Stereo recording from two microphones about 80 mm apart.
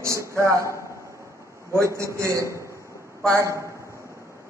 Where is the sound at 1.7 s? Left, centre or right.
Right.